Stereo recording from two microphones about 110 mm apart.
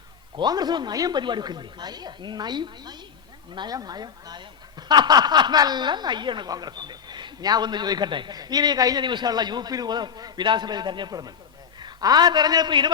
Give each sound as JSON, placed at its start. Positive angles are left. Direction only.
{"t": 0.3, "sound": "a man's voice", "side_deg": -40}